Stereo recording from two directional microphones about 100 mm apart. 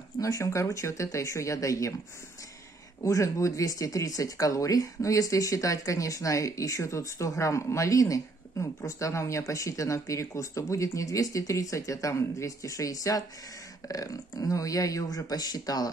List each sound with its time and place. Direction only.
0.2 s speech: 35° left (ahead or behind)
3.0 s speech: 30° left (ahead or behind)